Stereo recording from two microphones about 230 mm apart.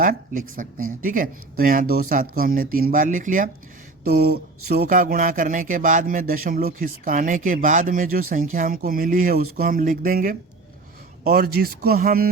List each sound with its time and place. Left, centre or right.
0.0 s speech: right